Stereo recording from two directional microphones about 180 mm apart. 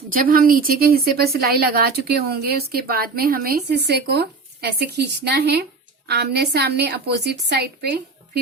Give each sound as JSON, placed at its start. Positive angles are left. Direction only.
{"t": 0.1, "sound": "a woman's voice", "side_deg": -50}